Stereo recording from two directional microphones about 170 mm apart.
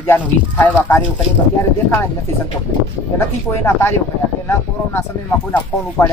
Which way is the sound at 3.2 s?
15° left (ahead or behind).